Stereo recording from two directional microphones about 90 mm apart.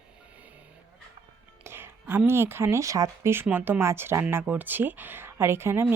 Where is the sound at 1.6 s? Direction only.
25° right (ahead or behind).